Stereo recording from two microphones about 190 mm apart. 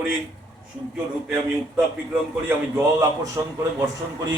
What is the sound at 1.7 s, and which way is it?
Speech, 5° right (ahead or behind).